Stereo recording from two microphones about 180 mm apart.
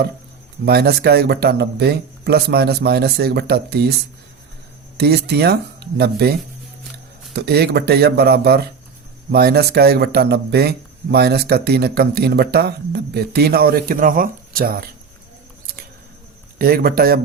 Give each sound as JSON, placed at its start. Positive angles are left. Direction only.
{"t": 0.6, "sound": "speech", "side_deg": -65}
{"t": 4.9, "sound": "speech", "side_deg": -65}
{"t": 7.3, "sound": "speech", "side_deg": -65}
{"t": 16.6, "sound": "speech", "side_deg": -55}